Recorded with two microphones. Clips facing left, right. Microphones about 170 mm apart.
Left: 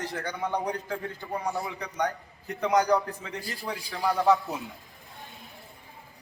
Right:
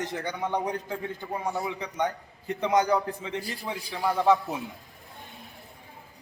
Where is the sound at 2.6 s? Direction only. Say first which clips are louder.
Even; 25° right (ahead or behind).